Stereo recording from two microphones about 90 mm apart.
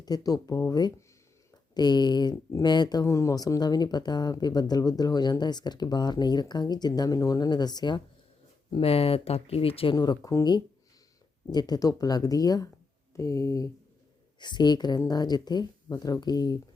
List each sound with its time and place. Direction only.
0.0 s speech: 45° left (ahead or behind)
3.1 s speech: 35° left (ahead or behind); by 8.0 s 55° left (ahead or behind)
8.7 s speech: 90° left
9.9 s speech: 45° left (ahead or behind)
11.5 s speech: 50° left (ahead or behind)
13.1 s a sound: 35° left (ahead or behind)
14.3 s speech: 55° left (ahead or behind)